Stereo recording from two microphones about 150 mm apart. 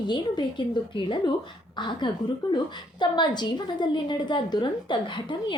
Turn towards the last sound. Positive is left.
turn(degrees=30)  # may be behind; listen again after turning